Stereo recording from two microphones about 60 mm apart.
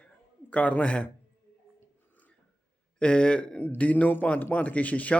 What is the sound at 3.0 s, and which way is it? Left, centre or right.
A man's voice, centre.